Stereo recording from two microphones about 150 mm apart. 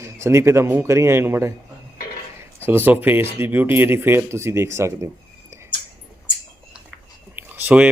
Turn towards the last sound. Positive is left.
turn(degrees=-10)  # may be behind; listen again after turning